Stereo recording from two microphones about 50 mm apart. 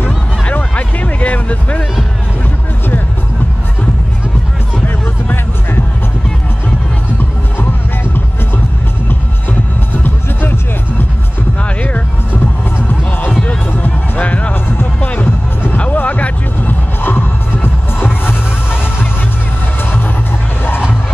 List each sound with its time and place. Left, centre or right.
0.5 s music: left
4.8 s music: left
10.0 s music: left
11.6 s music: left
13.4 s music: left
15.0 s music: left